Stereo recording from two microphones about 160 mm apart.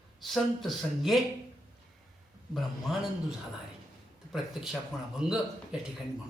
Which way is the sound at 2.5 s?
Centre (ahead or behind).